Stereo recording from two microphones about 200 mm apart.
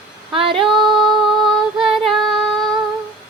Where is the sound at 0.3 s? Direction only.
25° right (ahead or behind).